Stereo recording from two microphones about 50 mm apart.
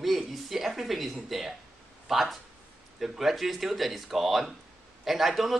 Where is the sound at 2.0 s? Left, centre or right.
Centre.